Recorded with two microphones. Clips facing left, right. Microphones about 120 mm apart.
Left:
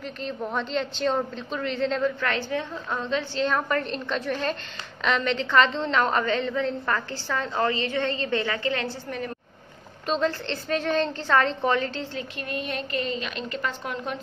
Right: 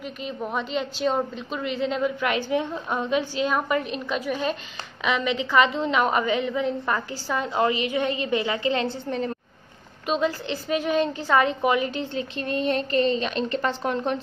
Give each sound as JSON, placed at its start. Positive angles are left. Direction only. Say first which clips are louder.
{"t": 0.0, "sound": "a woman's voice", "louder": "even", "side_deg": -5}
{"t": 10.0, "sound": "a woman's voice", "louder": "right 1 dB", "side_deg": -5}